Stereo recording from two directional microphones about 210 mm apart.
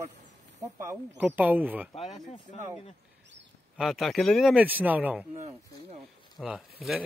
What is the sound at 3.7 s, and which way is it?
Speech, centre (ahead or behind).